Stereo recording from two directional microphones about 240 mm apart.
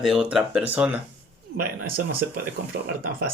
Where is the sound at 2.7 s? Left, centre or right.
Right.